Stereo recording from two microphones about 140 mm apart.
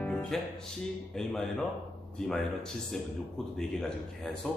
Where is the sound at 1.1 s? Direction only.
5° left (ahead or behind).